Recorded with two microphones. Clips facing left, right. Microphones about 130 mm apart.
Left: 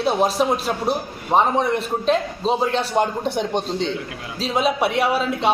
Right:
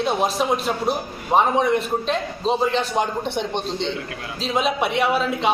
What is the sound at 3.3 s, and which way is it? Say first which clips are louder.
Speech: left 2 dB; 40° left (ahead or behind).